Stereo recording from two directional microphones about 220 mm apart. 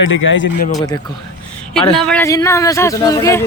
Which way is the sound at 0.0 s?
60° left (ahead or behind).